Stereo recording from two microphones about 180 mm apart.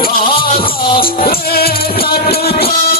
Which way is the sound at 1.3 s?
60° left (ahead or behind).